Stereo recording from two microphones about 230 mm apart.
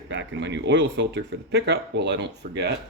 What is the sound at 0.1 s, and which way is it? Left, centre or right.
Speech, right.